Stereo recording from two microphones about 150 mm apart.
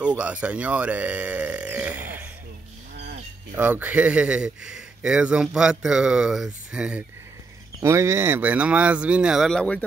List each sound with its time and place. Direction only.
0.0 s speech: 10° right (ahead or behind)
3.5 s speech: 10° right (ahead or behind)
7.8 s speech: 20° right (ahead or behind); by 9.8 s 5° left (ahead or behind)